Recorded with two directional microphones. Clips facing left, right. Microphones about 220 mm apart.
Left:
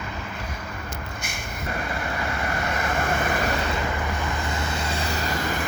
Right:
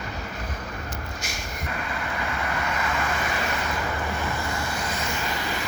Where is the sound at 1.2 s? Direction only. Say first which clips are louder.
Even; 55° left (ahead or behind).